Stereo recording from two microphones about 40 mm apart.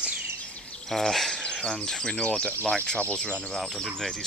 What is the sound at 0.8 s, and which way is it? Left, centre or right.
Speech, centre.